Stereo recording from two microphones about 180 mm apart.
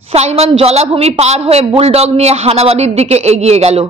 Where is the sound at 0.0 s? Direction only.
35° right (ahead or behind).